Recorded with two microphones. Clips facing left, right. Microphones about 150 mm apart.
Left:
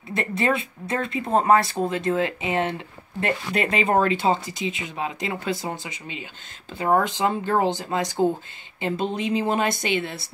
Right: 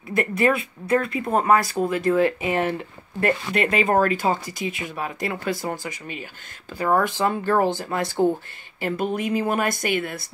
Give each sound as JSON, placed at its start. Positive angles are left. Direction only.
{"t": 0.1, "sound": "speech", "side_deg": 25}
{"t": 6.7, "sound": "speech", "side_deg": 25}